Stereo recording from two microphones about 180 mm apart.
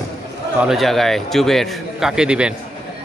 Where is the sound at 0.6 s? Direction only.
Centre (ahead or behind).